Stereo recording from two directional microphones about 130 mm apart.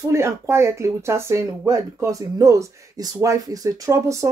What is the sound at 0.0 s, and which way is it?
Speech, 20° right (ahead or behind).